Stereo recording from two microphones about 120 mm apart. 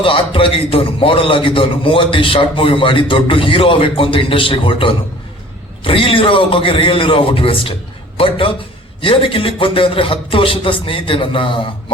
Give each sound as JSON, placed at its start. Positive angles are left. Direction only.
{"t": 0.0, "sound": "a man's voice", "side_deg": 50}